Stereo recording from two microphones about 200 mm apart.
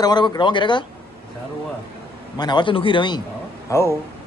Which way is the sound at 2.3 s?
20° left (ahead or behind).